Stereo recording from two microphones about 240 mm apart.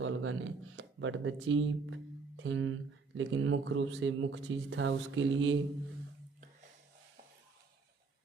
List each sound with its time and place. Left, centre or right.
0.0 s speech: right